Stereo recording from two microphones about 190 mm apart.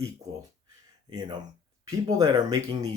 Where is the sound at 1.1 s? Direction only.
25° right (ahead or behind).